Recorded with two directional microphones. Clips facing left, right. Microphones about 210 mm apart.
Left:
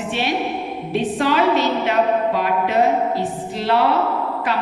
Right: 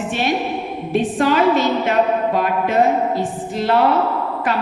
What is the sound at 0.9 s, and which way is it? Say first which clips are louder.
A woman's voice: right 2 dB; 50° right (ahead or behind).